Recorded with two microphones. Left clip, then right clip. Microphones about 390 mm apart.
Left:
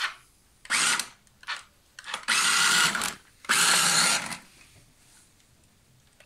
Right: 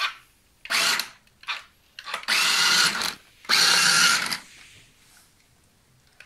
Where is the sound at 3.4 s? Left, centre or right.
Centre.